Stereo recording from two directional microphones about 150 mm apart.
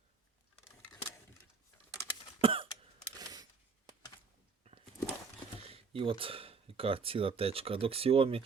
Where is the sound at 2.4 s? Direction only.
35° right (ahead or behind).